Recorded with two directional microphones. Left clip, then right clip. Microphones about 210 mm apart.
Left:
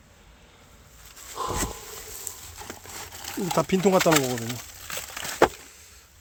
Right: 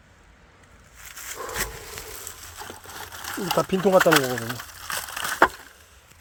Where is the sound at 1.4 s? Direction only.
10° left (ahead or behind).